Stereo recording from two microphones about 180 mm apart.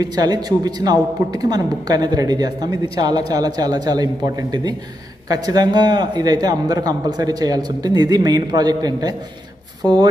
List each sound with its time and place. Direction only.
0.0 s a man's voice: 20° right (ahead or behind)